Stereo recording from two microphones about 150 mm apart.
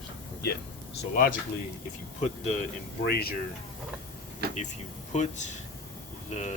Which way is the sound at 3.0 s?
90° left.